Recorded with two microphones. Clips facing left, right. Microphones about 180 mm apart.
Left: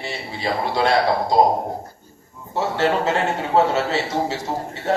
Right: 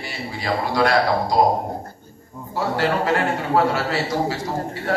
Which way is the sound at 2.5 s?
25° left (ahead or behind).